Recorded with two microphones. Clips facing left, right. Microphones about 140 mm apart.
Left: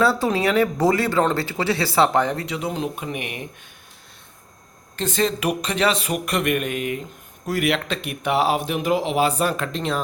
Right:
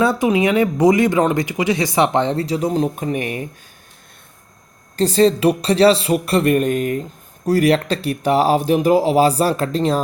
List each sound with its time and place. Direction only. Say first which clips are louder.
0.0 s speech: right 4 dB; 20° right (ahead or behind); by 3.2 s 40° right (ahead or behind)
4.9 s speech: right 8 dB; 35° right (ahead or behind)